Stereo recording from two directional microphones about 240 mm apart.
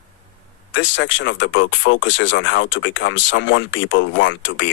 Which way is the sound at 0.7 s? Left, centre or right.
Left.